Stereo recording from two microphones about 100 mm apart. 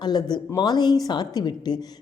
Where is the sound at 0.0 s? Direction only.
45° left (ahead or behind).